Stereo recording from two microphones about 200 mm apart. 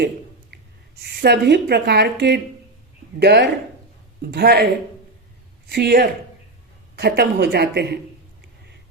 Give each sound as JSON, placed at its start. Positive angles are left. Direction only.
{"t": 1.0, "sound": "a woman's voice", "side_deg": -55}
{"t": 5.7, "sound": "a woman's voice", "side_deg": -55}